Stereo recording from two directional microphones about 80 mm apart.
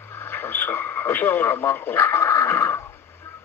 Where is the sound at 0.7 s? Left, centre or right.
Left.